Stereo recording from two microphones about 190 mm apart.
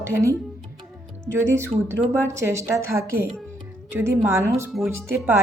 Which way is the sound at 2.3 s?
15° right (ahead or behind).